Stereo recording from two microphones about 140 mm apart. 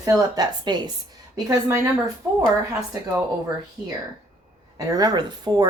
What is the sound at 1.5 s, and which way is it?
Speech, 20° right (ahead or behind).